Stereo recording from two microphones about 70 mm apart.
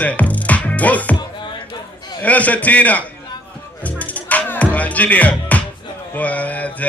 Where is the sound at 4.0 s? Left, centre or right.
Left.